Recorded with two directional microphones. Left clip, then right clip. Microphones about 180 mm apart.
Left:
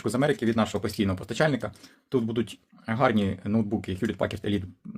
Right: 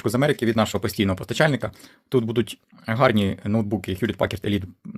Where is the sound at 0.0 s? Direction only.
35° right (ahead or behind).